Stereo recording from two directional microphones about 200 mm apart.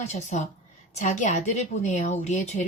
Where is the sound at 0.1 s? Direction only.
35° left (ahead or behind).